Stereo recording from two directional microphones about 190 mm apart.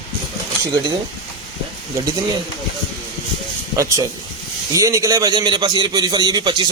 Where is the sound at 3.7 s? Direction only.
15° right (ahead or behind).